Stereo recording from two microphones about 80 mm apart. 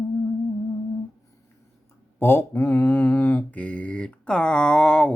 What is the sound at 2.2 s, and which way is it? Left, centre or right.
Mantra, left.